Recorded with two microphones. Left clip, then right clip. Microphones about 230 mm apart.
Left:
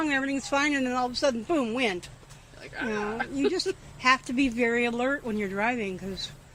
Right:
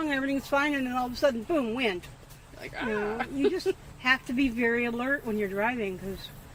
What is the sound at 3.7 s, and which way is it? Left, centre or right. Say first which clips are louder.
Speech: right 2 dB; centre.